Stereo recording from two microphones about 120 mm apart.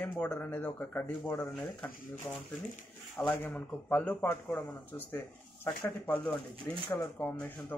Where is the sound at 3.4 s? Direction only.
15° left (ahead or behind).